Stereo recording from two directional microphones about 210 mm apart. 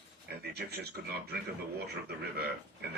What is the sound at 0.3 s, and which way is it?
Speech, 50° right (ahead or behind).